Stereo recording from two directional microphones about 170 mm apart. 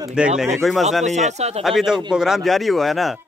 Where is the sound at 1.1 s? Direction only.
45° right (ahead or behind).